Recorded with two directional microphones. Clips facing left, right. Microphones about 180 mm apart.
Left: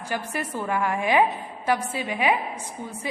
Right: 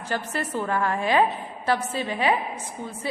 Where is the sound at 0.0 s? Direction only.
10° left (ahead or behind).